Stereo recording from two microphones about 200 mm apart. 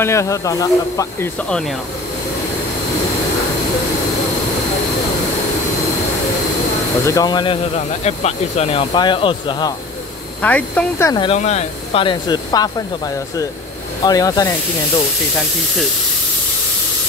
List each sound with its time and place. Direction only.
0.0 s speech: 15° left (ahead or behind)
7.1 s speech: 20° left (ahead or behind)
10.4 s speech: 10° left (ahead or behind)
11.2 s speech: 35° left (ahead or behind)
14.0 s speech: 20° left (ahead or behind)